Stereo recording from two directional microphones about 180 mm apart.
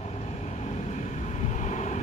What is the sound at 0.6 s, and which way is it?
Vehicle, 40° left (ahead or behind).